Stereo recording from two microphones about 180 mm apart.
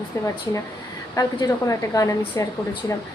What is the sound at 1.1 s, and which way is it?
A woman's voice, 20° left (ahead or behind).